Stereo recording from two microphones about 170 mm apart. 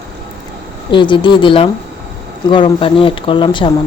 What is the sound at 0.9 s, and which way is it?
A woman's voice, 30° left (ahead or behind).